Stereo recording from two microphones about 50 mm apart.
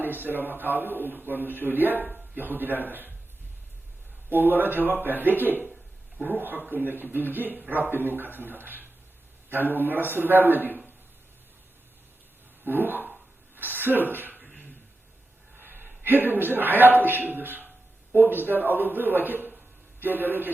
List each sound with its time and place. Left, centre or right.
0.0 s a man's voice: right
4.3 s a man's voice: right
12.6 s a man's voice: right
13.6 s a sound: right
15.5 s a man's voice: right